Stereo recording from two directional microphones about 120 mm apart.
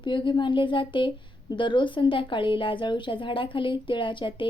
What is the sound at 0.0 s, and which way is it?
A woman's voice, 40° left (ahead or behind).